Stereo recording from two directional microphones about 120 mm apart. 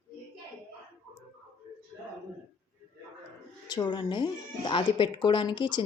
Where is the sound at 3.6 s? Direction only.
35° left (ahead or behind).